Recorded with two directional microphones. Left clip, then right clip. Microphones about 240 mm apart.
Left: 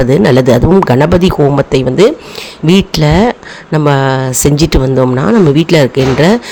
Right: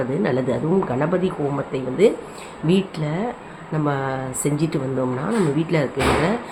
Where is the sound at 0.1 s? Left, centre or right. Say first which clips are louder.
Left 14 dB; left.